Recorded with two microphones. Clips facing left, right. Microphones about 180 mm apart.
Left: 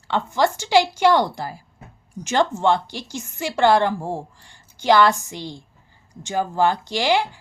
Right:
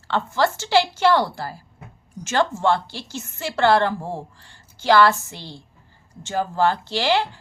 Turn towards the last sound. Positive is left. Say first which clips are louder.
# left 1 dB
turn(degrees=15)  # may be behind; listen again after turning